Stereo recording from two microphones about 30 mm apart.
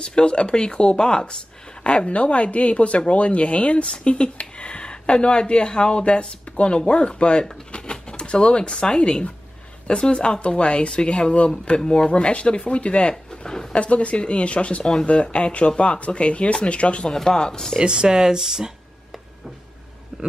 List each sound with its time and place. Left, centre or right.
0.0 s speech: left
7.8 s typewriter: left
9.0 s speech: left
10.9 s speech: left
13.3 s a sound: left
13.7 s speech: left
17.1 s speech: centre
17.8 s speech: right
20.1 s a sound: centre